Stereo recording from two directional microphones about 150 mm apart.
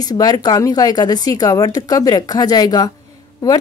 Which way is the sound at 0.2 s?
25° left (ahead or behind).